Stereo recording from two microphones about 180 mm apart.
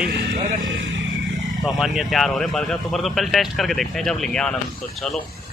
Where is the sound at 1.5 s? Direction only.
Centre (ahead or behind).